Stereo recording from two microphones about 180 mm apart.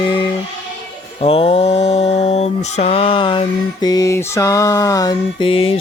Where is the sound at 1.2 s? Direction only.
30° left (ahead or behind).